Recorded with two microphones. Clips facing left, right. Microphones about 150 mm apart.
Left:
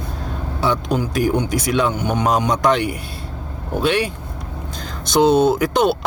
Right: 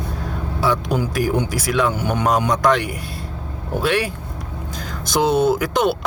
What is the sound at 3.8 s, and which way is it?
Speech, centre (ahead or behind).